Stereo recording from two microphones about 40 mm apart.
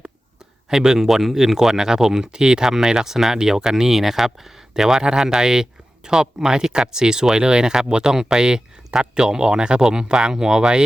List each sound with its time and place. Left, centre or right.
0.7 s speech: centre